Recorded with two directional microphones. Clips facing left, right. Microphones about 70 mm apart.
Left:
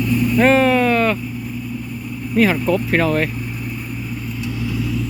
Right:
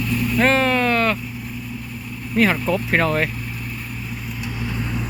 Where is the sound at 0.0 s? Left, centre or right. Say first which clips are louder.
Left 4 dB; centre.